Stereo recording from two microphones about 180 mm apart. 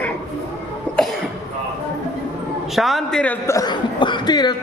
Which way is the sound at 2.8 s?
Centre (ahead or behind).